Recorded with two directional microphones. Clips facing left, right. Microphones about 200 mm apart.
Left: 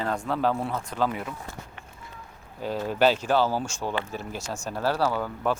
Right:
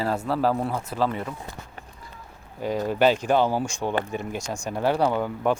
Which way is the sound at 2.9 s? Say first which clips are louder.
Right 1 dB; 10° right (ahead or behind).